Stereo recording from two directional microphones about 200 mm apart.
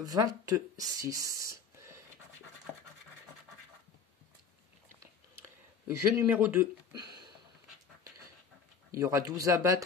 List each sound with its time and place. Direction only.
0.0 s speech: 20° right (ahead or behind)
5.9 s speech: 10° right (ahead or behind)
8.9 s speech: 15° right (ahead or behind)